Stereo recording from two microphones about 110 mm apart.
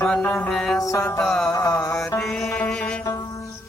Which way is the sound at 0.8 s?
30° left (ahead or behind).